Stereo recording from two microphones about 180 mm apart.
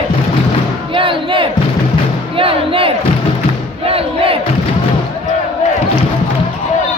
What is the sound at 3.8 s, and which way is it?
Crowd, 30° right (ahead or behind).